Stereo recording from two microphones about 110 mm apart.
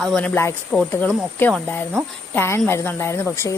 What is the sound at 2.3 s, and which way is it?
Speech, 20° left (ahead or behind).